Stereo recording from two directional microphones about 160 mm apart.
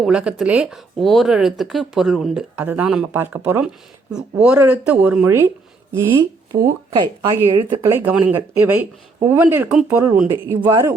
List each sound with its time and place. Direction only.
0.0 s speech: 5° right (ahead or behind)